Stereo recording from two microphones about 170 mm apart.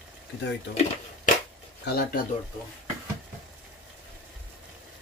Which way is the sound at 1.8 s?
65° left (ahead or behind).